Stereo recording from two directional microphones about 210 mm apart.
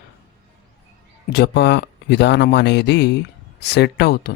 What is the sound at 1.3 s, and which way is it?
Speech, 50° left (ahead or behind).